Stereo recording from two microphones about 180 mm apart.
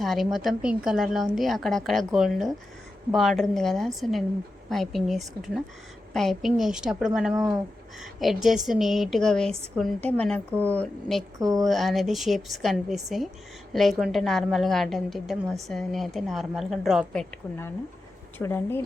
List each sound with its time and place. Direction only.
0.0 s a woman's voice: centre (ahead or behind)
11.3 s a woman's voice: 20° right (ahead or behind)
11.6 s a woman's voice: centre (ahead or behind)